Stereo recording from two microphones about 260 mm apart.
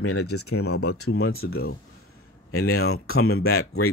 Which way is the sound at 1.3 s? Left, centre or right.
Left.